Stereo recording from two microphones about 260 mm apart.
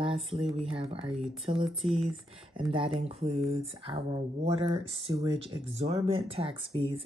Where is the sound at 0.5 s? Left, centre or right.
Right.